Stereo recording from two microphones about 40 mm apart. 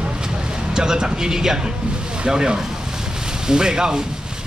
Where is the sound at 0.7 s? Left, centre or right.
Centre.